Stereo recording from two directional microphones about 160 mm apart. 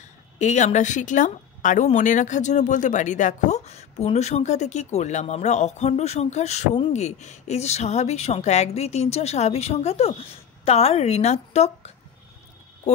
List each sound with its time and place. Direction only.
0.4 s a woman's voice: 45° left (ahead or behind)